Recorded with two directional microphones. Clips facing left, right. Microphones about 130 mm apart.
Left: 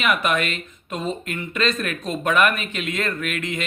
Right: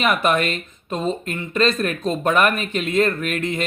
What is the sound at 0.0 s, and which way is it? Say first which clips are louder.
Speech: right 3 dB; 35° right (ahead or behind).